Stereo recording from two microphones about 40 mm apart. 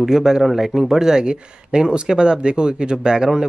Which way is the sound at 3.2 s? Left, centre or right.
Centre.